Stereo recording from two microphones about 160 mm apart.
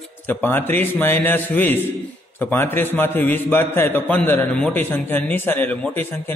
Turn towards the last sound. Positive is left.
turn(degrees=10)  # may be behind; listen again after turning